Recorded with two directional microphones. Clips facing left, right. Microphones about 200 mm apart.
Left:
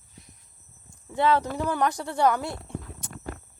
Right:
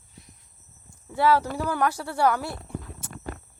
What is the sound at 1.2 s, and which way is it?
Speech, 20° left (ahead or behind).